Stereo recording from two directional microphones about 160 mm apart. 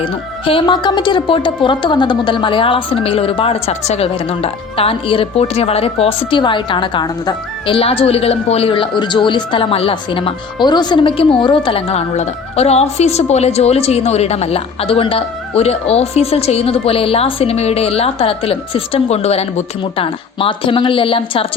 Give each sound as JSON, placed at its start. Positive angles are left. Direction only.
{"t": 0.0, "sound": "speech", "side_deg": 35}